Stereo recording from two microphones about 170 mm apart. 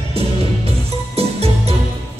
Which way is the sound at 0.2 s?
35° right (ahead or behind).